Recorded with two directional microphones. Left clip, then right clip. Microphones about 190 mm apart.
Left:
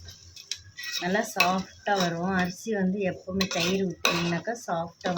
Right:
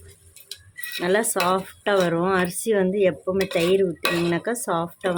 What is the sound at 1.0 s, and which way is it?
Speech, 65° right (ahead or behind).